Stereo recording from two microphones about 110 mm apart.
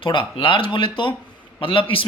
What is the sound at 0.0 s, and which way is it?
Speech, 50° left (ahead or behind).